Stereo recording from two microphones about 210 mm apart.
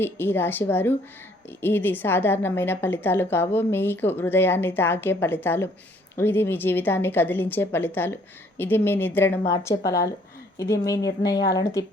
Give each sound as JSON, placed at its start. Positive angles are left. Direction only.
{"t": 0.0, "sound": "a woman's voice", "side_deg": 10}